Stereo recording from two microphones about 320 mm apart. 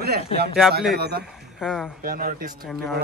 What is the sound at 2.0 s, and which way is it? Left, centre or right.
Speech, right.